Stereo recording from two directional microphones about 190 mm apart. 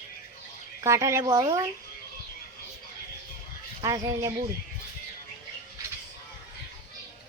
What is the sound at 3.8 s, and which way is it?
Speech, 20° right (ahead or behind).